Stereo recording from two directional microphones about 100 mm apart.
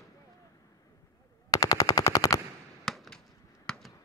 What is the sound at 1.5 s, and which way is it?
Machine gun, 35° left (ahead or behind).